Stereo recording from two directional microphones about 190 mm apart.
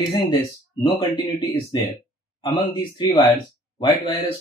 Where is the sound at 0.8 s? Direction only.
25° left (ahead or behind).